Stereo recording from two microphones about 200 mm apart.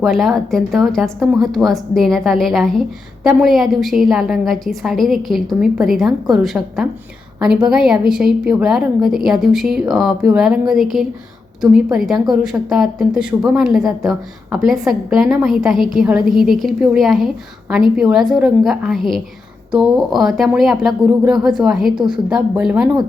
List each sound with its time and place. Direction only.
0.0 s a woman's voice: centre (ahead or behind)